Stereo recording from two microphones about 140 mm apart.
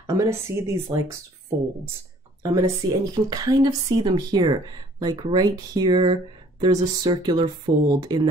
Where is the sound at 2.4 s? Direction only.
25° right (ahead or behind).